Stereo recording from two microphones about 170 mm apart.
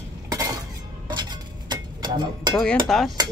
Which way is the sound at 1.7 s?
25° right (ahead or behind).